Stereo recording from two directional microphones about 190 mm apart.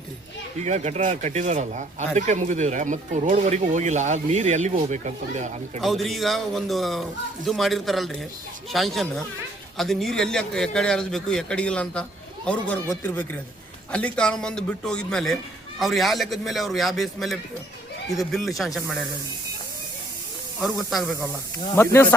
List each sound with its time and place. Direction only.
0.6 s speech: 35° right (ahead or behind)
5.8 s a man's voice: centre (ahead or behind)
20.6 s a man's voice: centre (ahead or behind)
21.8 s speech: 15° left (ahead or behind)